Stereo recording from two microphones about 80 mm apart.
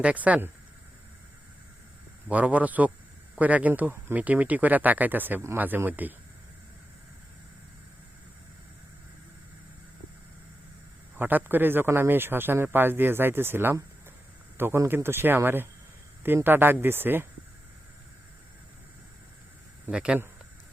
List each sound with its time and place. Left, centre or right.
0.0 s a man's voice: centre
2.2 s a man's voice: centre
11.2 s a man's voice: right
19.9 s speech: centre